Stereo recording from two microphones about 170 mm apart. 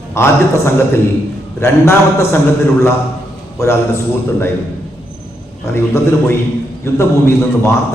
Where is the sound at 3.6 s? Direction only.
15° left (ahead or behind).